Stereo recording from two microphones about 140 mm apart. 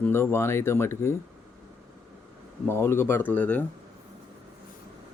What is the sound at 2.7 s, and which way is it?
Speech, 15° left (ahead or behind).